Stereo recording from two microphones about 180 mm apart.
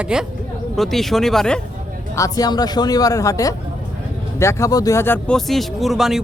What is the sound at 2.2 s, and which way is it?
Speech, 20° left (ahead or behind).